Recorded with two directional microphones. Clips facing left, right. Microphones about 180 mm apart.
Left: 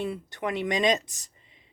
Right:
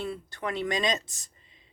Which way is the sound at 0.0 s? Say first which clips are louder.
Left 3 dB; 20° left (ahead or behind).